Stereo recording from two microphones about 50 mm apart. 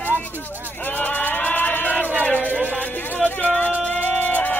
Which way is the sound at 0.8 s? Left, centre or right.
Left.